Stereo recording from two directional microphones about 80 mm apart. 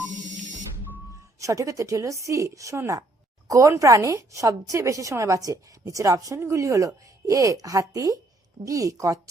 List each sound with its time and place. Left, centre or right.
1.4 s a woman's voice: right